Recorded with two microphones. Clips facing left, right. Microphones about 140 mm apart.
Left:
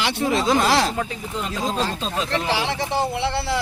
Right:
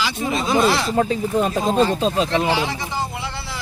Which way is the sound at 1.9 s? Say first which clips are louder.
Right 6 dB; 30° right (ahead or behind).